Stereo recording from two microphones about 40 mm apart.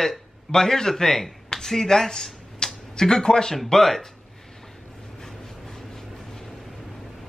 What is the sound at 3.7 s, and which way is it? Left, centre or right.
Speech, centre.